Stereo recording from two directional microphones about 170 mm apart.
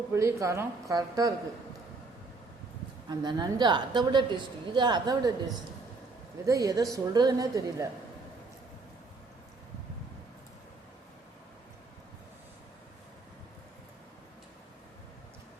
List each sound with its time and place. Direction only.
0.1 s a woman's voice: 15° right (ahead or behind)
3.1 s a woman's voice: 25° right (ahead or behind)
6.4 s a woman's voice: 20° right (ahead or behind)